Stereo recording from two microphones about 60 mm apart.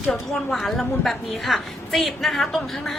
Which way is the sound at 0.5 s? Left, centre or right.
Centre.